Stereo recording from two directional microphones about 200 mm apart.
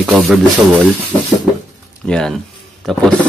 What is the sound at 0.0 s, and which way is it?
Speech, centre (ahead or behind).